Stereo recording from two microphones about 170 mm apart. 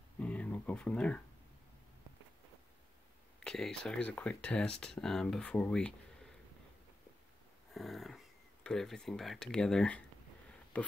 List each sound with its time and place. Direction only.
0.2 s speech: 5° left (ahead or behind)
3.3 s speech: 5° left (ahead or behind)
7.7 s dog: centre (ahead or behind)
8.6 s speech: 5° left (ahead or behind)